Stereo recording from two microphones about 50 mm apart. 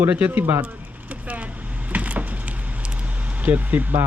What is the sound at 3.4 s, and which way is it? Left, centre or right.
Speech, right.